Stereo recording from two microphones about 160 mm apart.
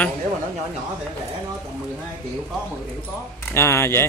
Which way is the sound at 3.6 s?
15° left (ahead or behind).